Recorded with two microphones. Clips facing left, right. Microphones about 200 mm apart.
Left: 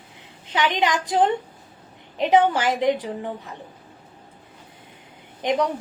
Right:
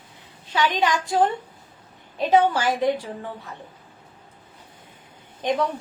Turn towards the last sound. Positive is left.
turn(degrees=15)  # may be behind; listen again after turning